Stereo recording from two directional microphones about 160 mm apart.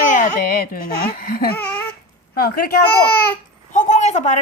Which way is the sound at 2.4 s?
65° left (ahead or behind).